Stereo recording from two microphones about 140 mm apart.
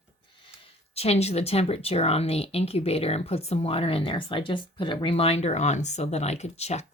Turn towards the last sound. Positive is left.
turn(degrees=50)  # may be behind; listen again after turning